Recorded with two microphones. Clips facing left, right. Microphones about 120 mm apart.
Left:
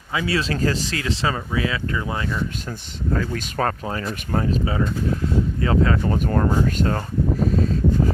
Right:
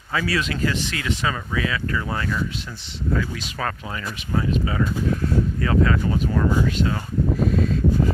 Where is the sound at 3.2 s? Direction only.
50° left (ahead or behind); by 6.0 s 30° left (ahead or behind).